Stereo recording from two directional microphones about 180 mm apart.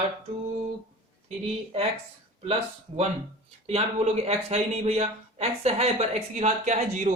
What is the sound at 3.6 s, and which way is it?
Speech, 35° right (ahead or behind).